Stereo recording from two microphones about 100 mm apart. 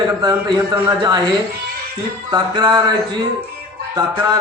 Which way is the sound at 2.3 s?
45° right (ahead or behind).